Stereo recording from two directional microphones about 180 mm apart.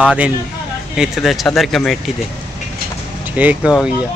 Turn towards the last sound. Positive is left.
turn(degrees=-10)  # may be behind; listen again after turning